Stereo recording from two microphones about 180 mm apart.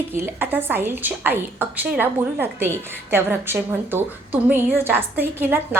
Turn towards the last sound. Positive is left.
turn(degrees=-10)  # may be behind; listen again after turning